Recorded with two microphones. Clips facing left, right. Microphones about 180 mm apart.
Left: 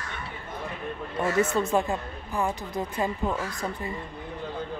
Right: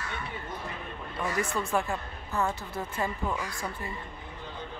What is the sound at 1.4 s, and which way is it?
A woman's voice, 20° left (ahead or behind).